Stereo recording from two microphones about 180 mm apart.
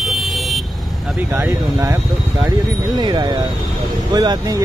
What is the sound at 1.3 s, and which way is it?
Speech, 15° right (ahead or behind).